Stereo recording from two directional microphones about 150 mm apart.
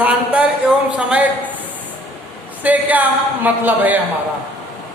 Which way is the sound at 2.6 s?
10° right (ahead or behind).